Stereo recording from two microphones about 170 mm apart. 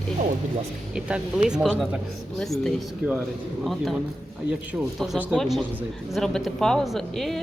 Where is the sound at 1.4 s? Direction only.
5° right (ahead or behind).